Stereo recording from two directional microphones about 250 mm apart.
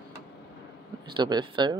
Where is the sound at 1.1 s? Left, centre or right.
Centre.